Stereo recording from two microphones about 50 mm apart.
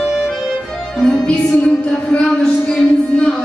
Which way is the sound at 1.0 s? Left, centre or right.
Centre.